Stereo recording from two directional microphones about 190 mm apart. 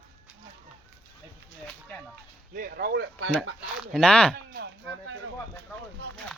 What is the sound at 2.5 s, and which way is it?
Speech, 55° right (ahead or behind).